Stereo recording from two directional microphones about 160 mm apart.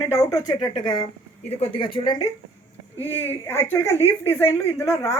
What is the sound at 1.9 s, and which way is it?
Speech, 25° left (ahead or behind).